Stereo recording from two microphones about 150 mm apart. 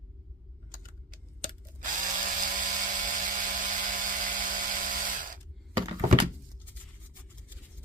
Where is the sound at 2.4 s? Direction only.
60° right (ahead or behind).